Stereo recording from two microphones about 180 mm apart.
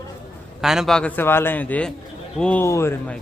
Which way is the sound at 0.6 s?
Centre (ahead or behind).